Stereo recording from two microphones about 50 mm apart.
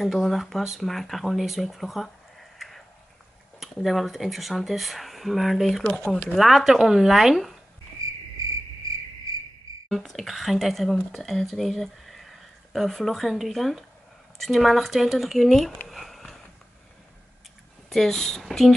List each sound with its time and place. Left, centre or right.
0.0 s speech: centre
2.6 s a sound: centre
3.5 s speech: centre
8.0 s cricket: right
9.8 s speech: centre
15.9 s sniff: centre
17.8 s a woman's voice: centre